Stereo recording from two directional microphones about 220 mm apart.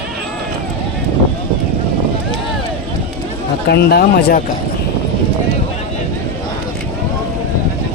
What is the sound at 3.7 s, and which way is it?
Speech, 45° left (ahead or behind).